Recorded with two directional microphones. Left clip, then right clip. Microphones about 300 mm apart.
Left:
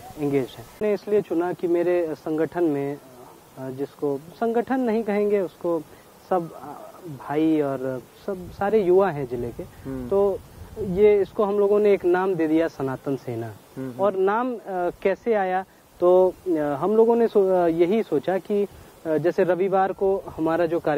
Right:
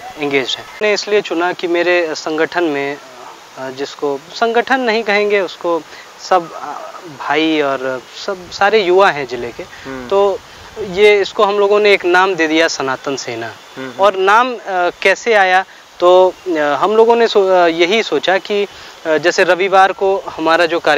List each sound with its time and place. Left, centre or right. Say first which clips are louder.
0.2 s speech: right 9 dB; centre
20.0 s speech: right 8 dB; right
20.4 s speech: right 10 dB; centre